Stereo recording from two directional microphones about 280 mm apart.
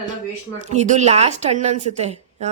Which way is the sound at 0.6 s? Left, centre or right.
Right.